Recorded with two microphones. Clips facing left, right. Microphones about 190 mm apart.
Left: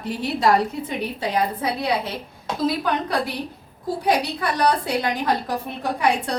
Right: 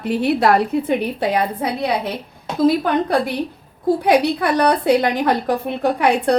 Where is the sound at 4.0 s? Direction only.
60° right (ahead or behind).